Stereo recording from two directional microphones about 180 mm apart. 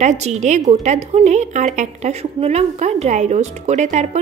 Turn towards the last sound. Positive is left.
turn(degrees=-40)  # may be behind; listen again after turning